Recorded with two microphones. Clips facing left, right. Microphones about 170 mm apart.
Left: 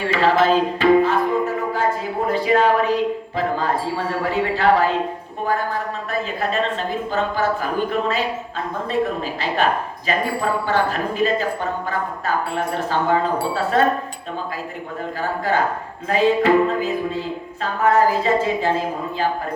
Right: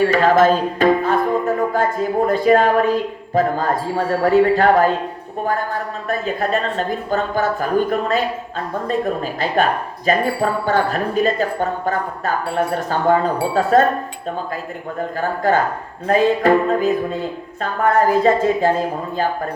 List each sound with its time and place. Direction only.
0.0 s music: 50° right (ahead or behind)
2.2 s speech: 45° right (ahead or behind)
15.2 s speech: 45° right (ahead or behind)
18.2 s speech: 45° right (ahead or behind)